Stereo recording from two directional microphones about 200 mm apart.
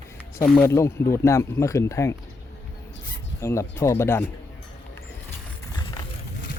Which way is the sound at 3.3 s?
15° left (ahead or behind).